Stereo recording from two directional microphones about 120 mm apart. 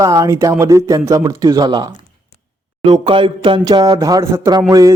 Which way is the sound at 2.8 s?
40° right (ahead or behind).